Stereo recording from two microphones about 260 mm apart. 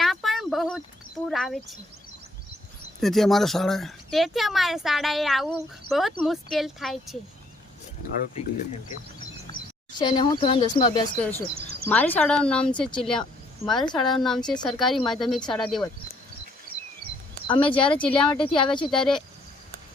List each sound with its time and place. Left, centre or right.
0.0 s a sound: centre
1.3 s speech: centre
3.0 s speech: centre
10.0 s speech: centre
11.2 s speech: centre
17.4 s speech: centre
18.9 s speech: centre